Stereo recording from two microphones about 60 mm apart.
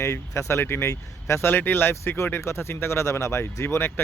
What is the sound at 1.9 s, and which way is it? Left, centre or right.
A man's voice, left.